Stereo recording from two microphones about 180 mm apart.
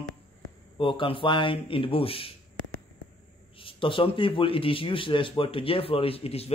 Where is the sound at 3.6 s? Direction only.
30° left (ahead or behind).